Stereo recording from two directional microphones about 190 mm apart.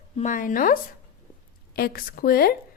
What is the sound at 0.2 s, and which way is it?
A woman's voice, 40° left (ahead or behind).